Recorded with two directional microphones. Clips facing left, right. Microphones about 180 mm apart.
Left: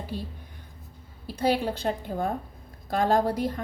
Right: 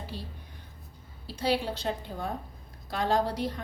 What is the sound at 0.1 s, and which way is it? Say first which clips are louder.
Speech: left 8 dB; 50° left (ahead or behind).